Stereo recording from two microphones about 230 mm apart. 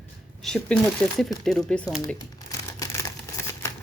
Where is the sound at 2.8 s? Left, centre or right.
Centre.